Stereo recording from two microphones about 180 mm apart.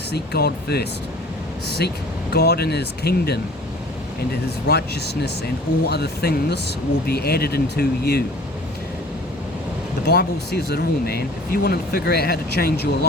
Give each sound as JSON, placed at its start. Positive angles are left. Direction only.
{"t": 0.1, "sound": "speech", "side_deg": 60}
{"t": 2.3, "sound": "speech", "side_deg": 65}
{"t": 4.7, "sound": "speech", "side_deg": 65}
{"t": 10.1, "sound": "speech", "side_deg": 65}